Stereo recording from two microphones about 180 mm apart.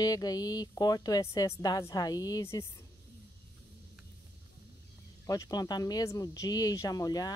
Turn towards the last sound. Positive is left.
turn(degrees=20)  # may be behind; listen again after turning